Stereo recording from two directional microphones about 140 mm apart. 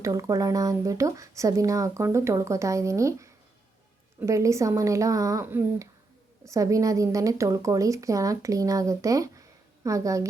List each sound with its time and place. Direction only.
0.0 s speech: 25° right (ahead or behind)
4.3 s speech: 20° right (ahead or behind)